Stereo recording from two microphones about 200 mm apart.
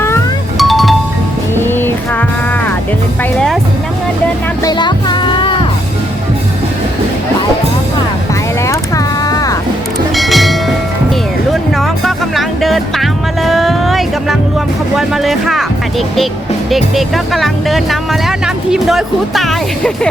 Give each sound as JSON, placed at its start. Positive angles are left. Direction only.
{"t": 0.6, "sound": "music", "side_deg": 0}
{"t": 1.6, "sound": "music", "side_deg": 10}
{"t": 4.6, "sound": "music", "side_deg": 20}
{"t": 9.2, "sound": "music", "side_deg": 20}
{"t": 10.2, "sound": "music", "side_deg": 0}
{"t": 16.6, "sound": "speech", "side_deg": 0}